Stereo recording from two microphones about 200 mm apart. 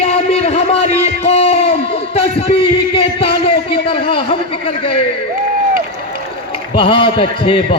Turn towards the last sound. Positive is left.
turn(degrees=25)  # may be behind; listen again after turning